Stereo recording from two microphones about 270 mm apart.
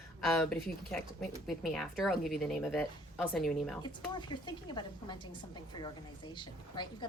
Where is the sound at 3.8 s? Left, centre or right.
Centre.